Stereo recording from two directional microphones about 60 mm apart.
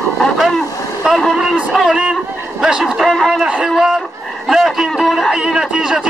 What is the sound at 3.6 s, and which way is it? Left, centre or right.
Speech, centre.